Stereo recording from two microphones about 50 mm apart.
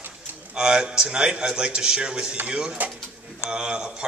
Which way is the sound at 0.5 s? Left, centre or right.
Centre.